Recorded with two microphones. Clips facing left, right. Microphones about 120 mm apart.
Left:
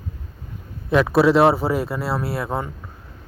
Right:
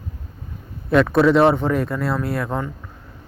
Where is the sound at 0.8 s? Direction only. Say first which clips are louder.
Right 1 dB; centre (ahead or behind).